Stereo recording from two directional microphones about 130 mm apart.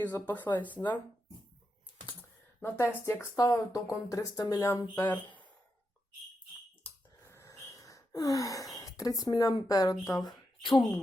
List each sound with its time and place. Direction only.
0.0 s speech: 15° left (ahead or behind)
2.6 s speech: 15° left (ahead or behind)
4.9 s speech: 10° left (ahead or behind)
7.3 s speech: 20° left (ahead or behind)